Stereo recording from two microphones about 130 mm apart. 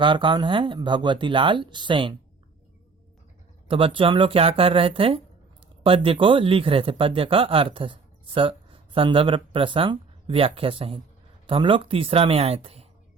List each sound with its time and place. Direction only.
0.0 s speech: 40° right (ahead or behind)
3.7 s speech: 45° right (ahead or behind)